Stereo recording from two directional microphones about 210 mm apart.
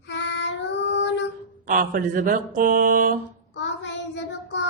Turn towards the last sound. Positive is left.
turn(degrees=55)  # may be behind; listen again after turning